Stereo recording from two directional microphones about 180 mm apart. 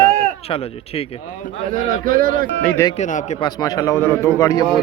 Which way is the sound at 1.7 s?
50° right (ahead or behind).